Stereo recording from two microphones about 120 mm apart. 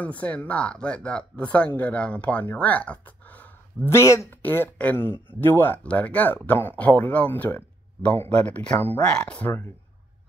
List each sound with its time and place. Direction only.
0.0 s speech: 10° left (ahead or behind)